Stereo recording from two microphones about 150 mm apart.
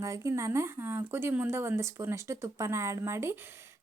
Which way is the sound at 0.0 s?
20° right (ahead or behind).